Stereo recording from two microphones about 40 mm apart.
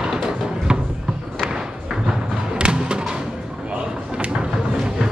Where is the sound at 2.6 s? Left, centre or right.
Right.